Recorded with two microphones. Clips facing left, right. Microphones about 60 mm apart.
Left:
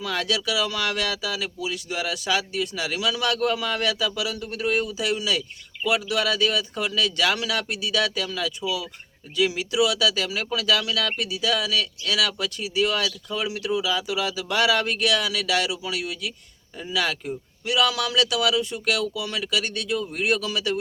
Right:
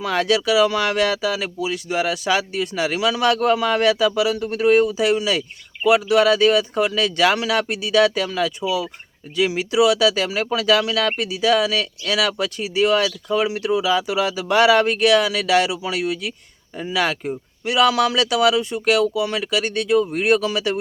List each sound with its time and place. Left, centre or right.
0.0 s speech: right